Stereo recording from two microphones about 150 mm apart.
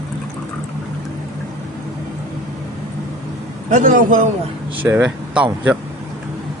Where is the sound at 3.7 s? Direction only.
60° right (ahead or behind).